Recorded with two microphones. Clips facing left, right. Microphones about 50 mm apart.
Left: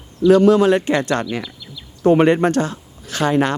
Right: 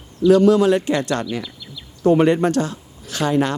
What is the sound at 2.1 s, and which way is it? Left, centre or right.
Speech, left.